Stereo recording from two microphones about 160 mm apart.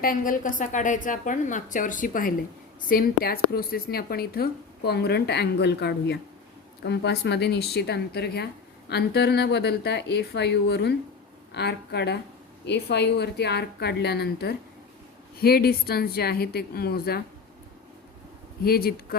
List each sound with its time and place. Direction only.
0.0 s a woman's voice: 60° left (ahead or behind)
2.9 s a woman's voice: 70° left (ahead or behind)
4.9 s speech: 90° left
15.4 s a woman's voice: 75° left (ahead or behind)
18.6 s a woman's voice: 70° left (ahead or behind)